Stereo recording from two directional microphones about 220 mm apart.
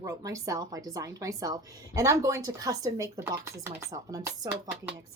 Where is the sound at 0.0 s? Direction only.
15° right (ahead or behind).